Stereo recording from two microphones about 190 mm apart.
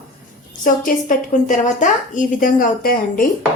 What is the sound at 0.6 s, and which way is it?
Speech, 45° left (ahead or behind).